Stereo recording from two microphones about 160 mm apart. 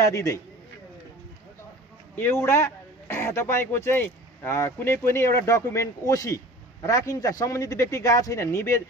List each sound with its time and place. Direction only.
0.0 s a man's voice: 20° left (ahead or behind)
2.1 s a man's voice: 15° left (ahead or behind)